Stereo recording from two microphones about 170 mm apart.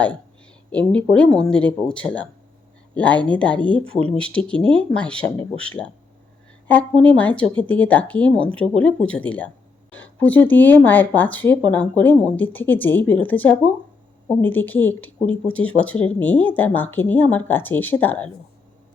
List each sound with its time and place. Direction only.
0.7 s speech: 5° left (ahead or behind)
6.7 s speech: 10° left (ahead or behind)